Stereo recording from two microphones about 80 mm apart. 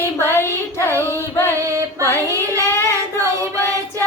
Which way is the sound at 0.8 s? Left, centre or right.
Left.